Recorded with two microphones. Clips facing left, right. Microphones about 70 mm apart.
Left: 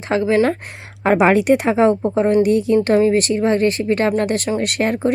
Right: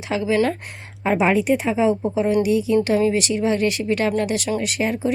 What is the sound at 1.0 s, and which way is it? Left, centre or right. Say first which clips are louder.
Speech: left 5 dB; left.